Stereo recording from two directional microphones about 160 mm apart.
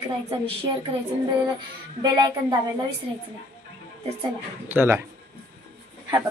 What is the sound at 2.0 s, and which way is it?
Speech, 25° right (ahead or behind).